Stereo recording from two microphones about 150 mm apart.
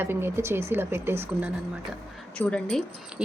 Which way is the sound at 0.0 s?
15° right (ahead or behind).